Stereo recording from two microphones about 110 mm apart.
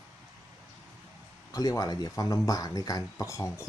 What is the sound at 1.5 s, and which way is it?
Speech, 35° left (ahead or behind).